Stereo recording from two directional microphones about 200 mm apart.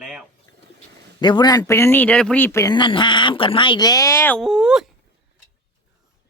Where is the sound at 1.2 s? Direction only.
20° left (ahead or behind); by 4.8 s centre (ahead or behind).